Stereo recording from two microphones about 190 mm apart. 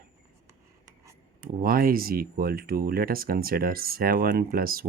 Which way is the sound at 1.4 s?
50° right (ahead or behind).